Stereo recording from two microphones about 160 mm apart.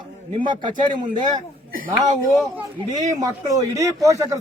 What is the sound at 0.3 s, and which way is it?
Speech, 30° right (ahead or behind).